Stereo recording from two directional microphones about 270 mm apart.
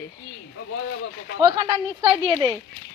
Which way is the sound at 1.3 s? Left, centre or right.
Centre.